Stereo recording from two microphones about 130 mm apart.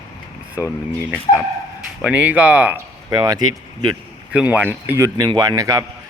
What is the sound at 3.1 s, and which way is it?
Speech, 30° right (ahead or behind).